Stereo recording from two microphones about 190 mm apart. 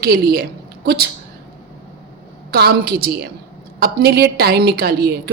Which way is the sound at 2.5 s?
55° right (ahead or behind).